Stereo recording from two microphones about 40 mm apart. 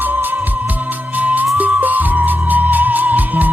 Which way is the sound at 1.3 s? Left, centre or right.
Right.